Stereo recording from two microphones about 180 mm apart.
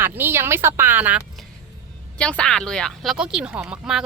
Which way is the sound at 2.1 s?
5° left (ahead or behind).